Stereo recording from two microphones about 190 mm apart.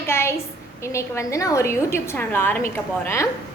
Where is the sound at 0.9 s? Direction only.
15° left (ahead or behind).